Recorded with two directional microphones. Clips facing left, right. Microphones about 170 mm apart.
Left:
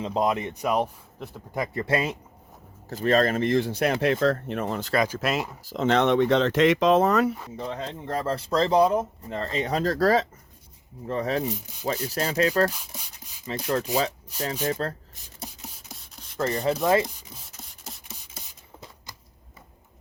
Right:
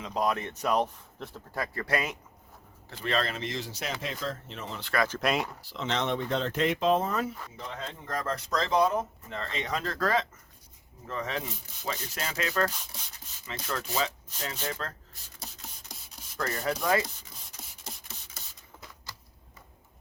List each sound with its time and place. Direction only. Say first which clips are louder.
0.0 s speech: left 4 dB; 25° left (ahead or behind)
2.9 s speech: left 9 dB; 45° left (ahead or behind)
5.0 s speech: left 2 dB; 5° left (ahead or behind)
5.6 s speech: left 9 dB; 45° left (ahead or behind); by 7.3 s 75° left (ahead or behind)
7.3 s speech: left 7 dB; 25° left (ahead or behind)
12.7 s speech: left 2 dB; 5° left (ahead or behind)
13.5 s speech: left 8 dB; 35° left (ahead or behind)
15.6 s a sound: left 4 dB; centre (ahead or behind)
16.4 s speech: left 6 dB; 25° left (ahead or behind)
17.5 s a sound: right 2 dB; centre (ahead or behind)